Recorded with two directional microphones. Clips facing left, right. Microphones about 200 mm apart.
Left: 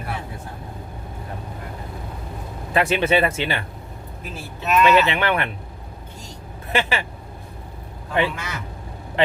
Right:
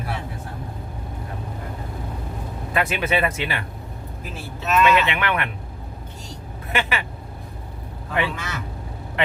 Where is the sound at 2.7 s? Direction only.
30° left (ahead or behind).